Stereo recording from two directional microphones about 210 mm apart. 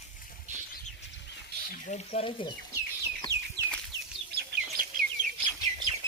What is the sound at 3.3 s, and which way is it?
Chicken, 15° right (ahead or behind).